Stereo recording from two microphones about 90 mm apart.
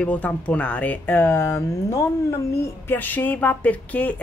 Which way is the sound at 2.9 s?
20° left (ahead or behind).